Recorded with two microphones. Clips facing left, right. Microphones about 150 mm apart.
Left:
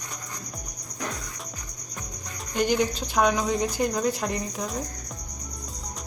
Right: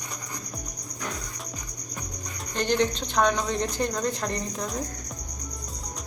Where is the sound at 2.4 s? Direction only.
10° left (ahead or behind).